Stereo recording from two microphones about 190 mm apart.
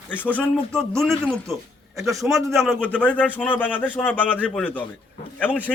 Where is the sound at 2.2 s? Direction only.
Centre (ahead or behind).